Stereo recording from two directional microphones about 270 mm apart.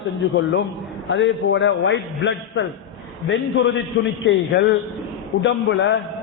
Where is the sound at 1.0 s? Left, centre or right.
Left.